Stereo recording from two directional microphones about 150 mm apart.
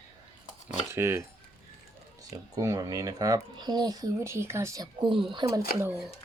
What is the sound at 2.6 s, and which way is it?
Speech, 20° right (ahead or behind).